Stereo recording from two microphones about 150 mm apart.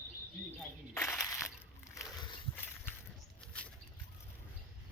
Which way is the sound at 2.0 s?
20° left (ahead or behind).